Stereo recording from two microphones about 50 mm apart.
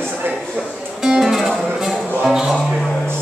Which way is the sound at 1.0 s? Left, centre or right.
Centre.